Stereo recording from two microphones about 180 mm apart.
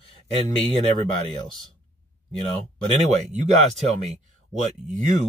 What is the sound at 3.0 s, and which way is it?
Speech, 40° right (ahead or behind).